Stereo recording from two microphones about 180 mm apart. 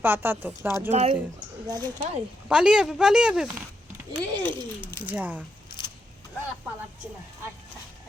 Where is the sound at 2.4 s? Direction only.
5° right (ahead or behind).